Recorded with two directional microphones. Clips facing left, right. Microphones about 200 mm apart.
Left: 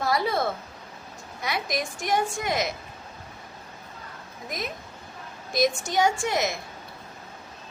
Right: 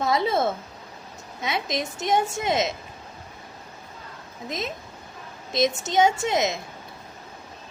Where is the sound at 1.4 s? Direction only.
20° right (ahead or behind).